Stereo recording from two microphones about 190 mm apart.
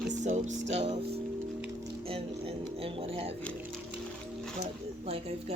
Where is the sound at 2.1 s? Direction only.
30° right (ahead or behind).